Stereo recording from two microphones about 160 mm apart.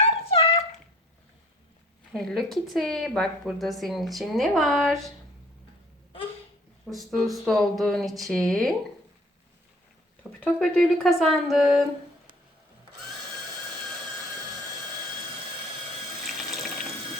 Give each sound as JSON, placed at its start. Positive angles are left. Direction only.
{"t": 0.0, "sound": "dog", "side_deg": 40}
{"t": 2.1, "sound": "speech", "side_deg": 0}
{"t": 6.9, "sound": "speech", "side_deg": 0}
{"t": 10.4, "sound": "speech", "side_deg": 5}
{"t": 16.2, "sound": "water", "side_deg": 0}